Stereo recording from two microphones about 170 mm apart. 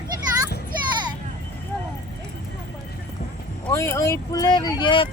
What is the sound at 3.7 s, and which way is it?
Speech, 15° left (ahead or behind).